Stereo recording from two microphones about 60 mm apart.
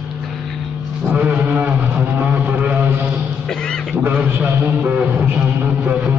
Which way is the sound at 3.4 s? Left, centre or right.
Centre.